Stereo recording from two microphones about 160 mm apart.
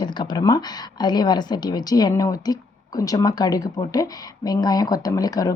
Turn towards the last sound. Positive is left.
turn(degrees=25)  # may be behind; listen again after turning